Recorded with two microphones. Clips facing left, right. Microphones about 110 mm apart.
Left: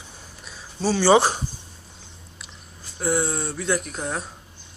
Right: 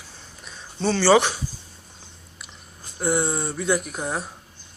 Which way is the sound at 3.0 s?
Centre (ahead or behind).